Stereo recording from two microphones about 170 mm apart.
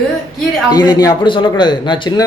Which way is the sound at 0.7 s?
25° left (ahead or behind).